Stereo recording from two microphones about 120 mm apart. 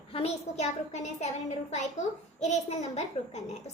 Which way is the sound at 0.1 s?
65° left (ahead or behind).